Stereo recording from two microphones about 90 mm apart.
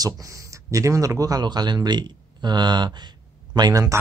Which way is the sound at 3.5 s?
40° right (ahead or behind).